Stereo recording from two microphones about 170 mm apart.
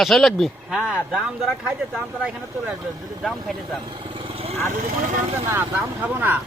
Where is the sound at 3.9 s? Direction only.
30° right (ahead or behind).